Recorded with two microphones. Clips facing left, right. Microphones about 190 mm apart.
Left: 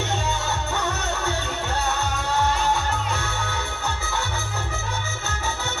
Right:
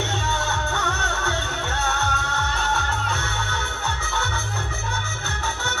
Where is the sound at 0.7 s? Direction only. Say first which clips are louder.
Left 1 dB; 15° left (ahead or behind).